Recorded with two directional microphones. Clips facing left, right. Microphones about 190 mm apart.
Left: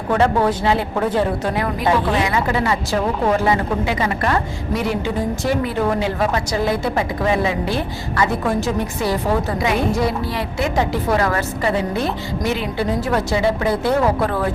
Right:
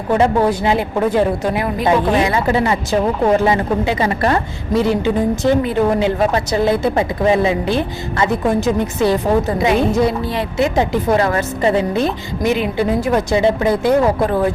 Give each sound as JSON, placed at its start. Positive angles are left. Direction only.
{"t": 0.1, "sound": "a woman's voice", "side_deg": -15}